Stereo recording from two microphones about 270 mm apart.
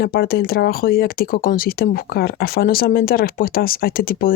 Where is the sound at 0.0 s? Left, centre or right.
Left.